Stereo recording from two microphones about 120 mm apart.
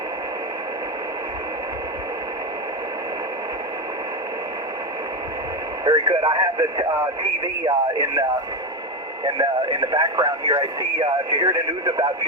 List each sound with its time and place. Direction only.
5.8 s speech: 40° right (ahead or behind)
9.2 s speech: 40° right (ahead or behind)